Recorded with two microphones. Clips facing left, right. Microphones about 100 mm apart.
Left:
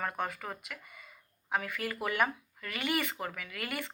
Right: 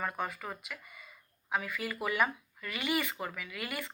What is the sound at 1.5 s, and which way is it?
A woman's voice, 50° left (ahead or behind).